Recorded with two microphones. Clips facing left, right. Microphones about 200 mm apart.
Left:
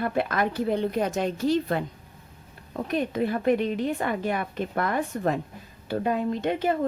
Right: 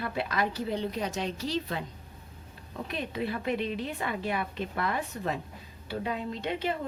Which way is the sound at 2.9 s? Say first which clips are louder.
Left 7 dB; 45° left (ahead or behind).